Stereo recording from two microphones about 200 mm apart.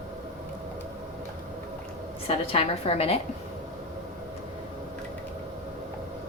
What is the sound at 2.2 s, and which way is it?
Speech, 30° left (ahead or behind).